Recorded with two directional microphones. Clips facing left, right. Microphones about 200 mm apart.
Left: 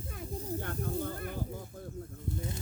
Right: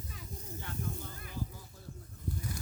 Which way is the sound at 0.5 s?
55° left (ahead or behind).